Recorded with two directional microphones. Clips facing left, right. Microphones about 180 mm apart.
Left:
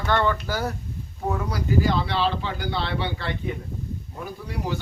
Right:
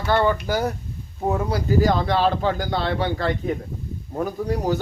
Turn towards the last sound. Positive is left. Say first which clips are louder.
# right 7 dB
turn(degrees=-40)  # may be behind; listen again after turning